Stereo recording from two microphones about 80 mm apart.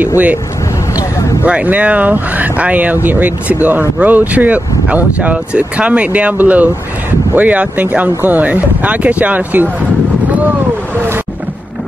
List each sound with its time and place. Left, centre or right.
1.4 s speech: centre